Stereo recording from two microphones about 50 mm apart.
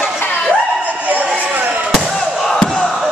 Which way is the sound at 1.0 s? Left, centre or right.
Right.